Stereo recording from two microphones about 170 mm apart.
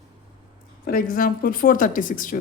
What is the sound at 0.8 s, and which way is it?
Speech, 60° left (ahead or behind).